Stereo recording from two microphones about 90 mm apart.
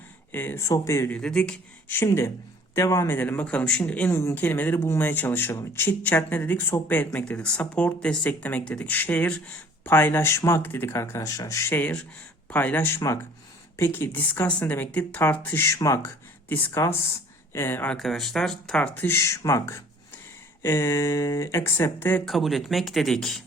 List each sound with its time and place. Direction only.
0.3 s speech: 25° left (ahead or behind)
0.6 s speech: 35° left (ahead or behind)
1.1 s speech: 10° left (ahead or behind)
2.0 s speech: 30° left (ahead or behind)
3.1 s speech: 20° left (ahead or behind)
4.1 s speech: 30° left (ahead or behind)
4.4 s speech: 20° left (ahead or behind)
11.2 s speech: 40° left (ahead or behind)
11.7 s speech: 15° left (ahead or behind)
15.6 s speech: 40° left (ahead or behind)
16.0 s speech: 25° left (ahead or behind)
17.8 s speech: 5° left (ahead or behind)
19.0 s speech: 30° left (ahead or behind)
22.3 s speech: centre (ahead or behind)